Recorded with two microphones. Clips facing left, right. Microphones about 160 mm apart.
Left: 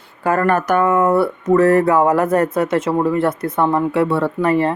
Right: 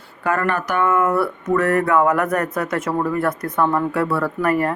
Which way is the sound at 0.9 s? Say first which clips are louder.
Left 1 dB; 25° left (ahead or behind).